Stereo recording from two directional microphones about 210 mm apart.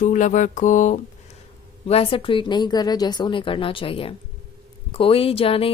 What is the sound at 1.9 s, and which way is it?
Speech, 25° left (ahead or behind).